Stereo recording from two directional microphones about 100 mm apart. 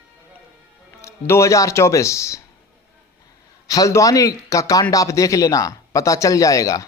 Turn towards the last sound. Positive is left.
turn(degrees=35)  # may be behind; listen again after turning